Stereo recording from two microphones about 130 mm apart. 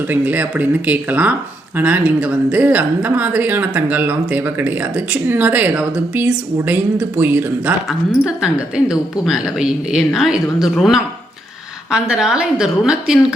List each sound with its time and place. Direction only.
0.1 s speech: 15° right (ahead or behind)
7.9 s speech: 5° right (ahead or behind)